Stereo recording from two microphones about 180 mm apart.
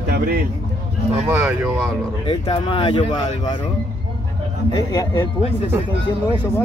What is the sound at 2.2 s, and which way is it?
Speech, 30° left (ahead or behind).